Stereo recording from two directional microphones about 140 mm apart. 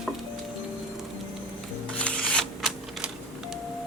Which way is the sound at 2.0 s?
5° left (ahead or behind).